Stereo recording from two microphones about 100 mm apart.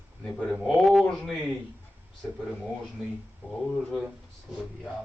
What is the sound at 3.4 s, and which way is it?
Speech, 20° right (ahead or behind).